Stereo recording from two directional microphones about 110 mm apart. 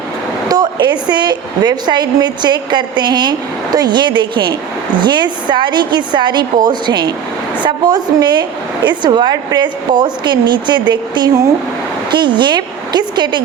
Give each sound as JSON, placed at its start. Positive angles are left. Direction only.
{"t": 0.4, "sound": "a woman's voice", "side_deg": -40}